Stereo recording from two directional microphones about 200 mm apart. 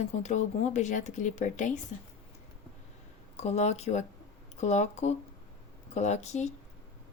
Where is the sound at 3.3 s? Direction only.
30° left (ahead or behind).